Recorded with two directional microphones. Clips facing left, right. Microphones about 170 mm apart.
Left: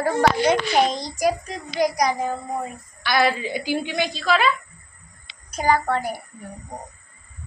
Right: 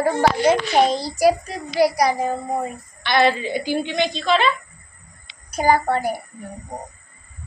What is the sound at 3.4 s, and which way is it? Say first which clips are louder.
A woman's voice: right 2 dB; 10° left (ahead or behind).